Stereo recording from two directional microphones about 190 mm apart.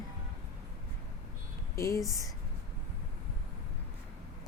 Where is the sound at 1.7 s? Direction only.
15° left (ahead or behind).